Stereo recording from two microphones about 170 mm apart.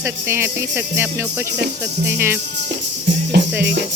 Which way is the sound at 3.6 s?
75° right (ahead or behind).